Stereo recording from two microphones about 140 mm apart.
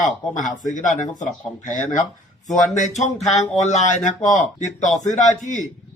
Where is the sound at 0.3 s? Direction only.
65° left (ahead or behind).